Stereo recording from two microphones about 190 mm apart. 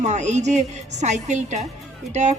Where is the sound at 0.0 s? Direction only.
35° right (ahead or behind).